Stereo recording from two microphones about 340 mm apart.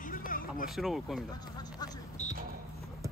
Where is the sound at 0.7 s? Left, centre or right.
Centre.